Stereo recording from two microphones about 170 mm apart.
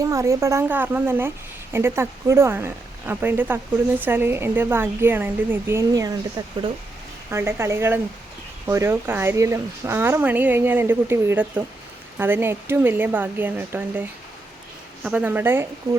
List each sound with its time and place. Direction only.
0.0 s speech: 15° right (ahead or behind)